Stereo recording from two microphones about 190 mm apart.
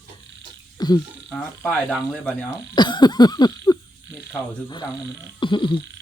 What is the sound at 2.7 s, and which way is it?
Frog, 25° left (ahead or behind).